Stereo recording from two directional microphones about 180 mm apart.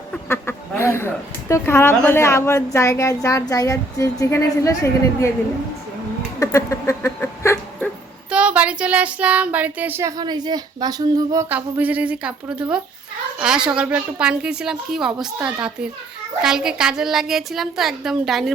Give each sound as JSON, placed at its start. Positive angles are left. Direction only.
{"t": 0.3, "sound": "a woman's voice", "side_deg": 15}
{"t": 6.4, "sound": "a woman's voice", "side_deg": 15}
{"t": 8.3, "sound": "a sound", "side_deg": -5}
{"t": 13.4, "sound": "a woman's voice", "side_deg": -5}